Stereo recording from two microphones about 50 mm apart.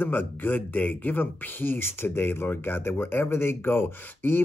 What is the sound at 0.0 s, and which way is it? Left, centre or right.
A man's voice, left.